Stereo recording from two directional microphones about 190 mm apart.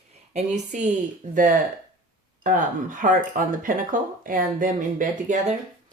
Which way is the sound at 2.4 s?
45° right (ahead or behind).